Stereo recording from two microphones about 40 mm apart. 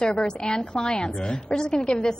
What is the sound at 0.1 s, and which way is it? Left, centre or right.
A woman's voice, centre.